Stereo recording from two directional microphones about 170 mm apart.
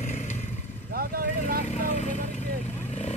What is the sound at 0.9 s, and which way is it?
Vehicle, 60° right (ahead or behind).